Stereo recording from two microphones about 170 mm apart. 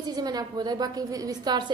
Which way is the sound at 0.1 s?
25° right (ahead or behind).